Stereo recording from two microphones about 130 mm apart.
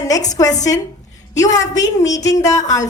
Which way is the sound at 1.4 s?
25° left (ahead or behind).